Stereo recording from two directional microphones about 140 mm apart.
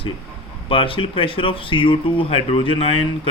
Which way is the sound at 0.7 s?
40° left (ahead or behind).